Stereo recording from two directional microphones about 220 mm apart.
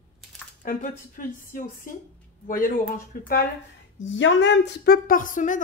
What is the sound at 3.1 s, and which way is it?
Speech, 40° left (ahead or behind).